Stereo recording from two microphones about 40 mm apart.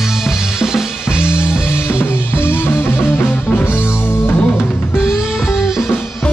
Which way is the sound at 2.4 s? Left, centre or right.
Left.